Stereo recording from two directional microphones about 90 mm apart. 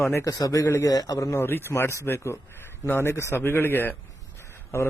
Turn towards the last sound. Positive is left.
turn(degrees=30)  # may be behind; listen again after turning